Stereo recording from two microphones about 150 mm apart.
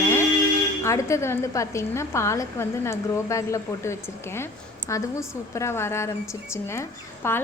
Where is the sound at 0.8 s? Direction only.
20° left (ahead or behind).